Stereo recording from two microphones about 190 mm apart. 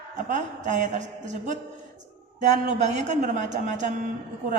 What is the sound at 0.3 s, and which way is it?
A woman's voice, 40° right (ahead or behind).